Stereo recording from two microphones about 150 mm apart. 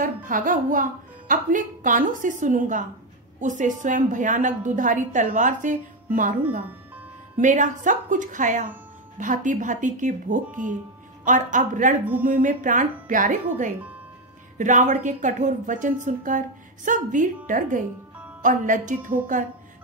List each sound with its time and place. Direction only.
0.0 s a woman's voice: 65° right (ahead or behind)
7.3 s a woman's voice: 55° right (ahead or behind)